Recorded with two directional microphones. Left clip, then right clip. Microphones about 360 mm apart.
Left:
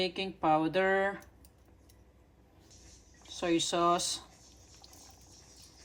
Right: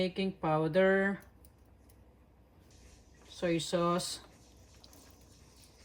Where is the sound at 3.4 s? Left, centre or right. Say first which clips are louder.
Left 2 dB; left.